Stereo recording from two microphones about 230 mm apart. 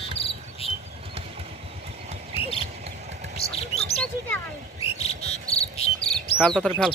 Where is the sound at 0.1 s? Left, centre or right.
Left.